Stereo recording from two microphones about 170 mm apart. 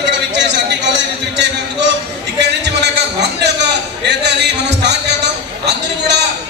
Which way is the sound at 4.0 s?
90° right.